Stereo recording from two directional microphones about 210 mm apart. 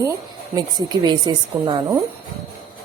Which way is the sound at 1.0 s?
20° right (ahead or behind).